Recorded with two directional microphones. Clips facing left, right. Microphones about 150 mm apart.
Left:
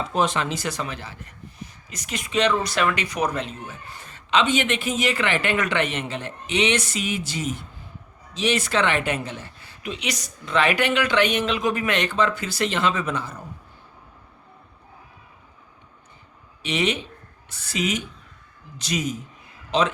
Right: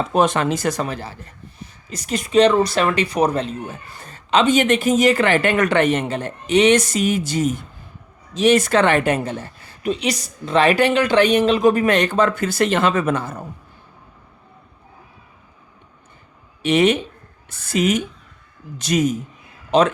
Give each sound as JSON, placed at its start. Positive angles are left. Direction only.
{"t": 0.1, "sound": "speech", "side_deg": -50}
{"t": 16.6, "sound": "speech", "side_deg": -50}